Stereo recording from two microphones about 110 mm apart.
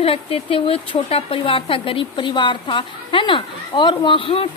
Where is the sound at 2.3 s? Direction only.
45° left (ahead or behind).